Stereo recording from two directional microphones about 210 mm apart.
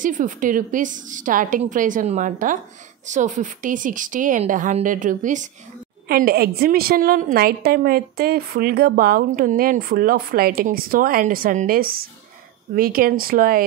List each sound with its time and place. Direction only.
0.0 s a woman's voice: 40° right (ahead or behind)